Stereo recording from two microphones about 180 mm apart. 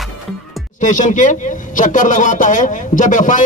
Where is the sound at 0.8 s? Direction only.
45° left (ahead or behind).